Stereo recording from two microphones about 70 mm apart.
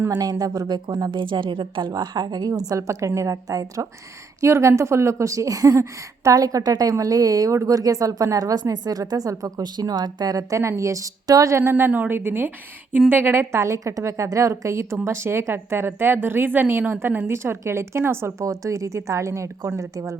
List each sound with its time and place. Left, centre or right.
0.1 s speech: right
0.7 s a woman's voice: right
2.6 s a woman's voice: right
11.5 s a woman's voice: right
18.4 s a woman's voice: right